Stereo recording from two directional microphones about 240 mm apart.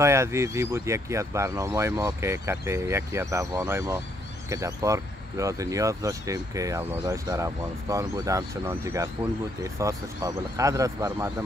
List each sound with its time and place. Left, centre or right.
0.0 s speech: centre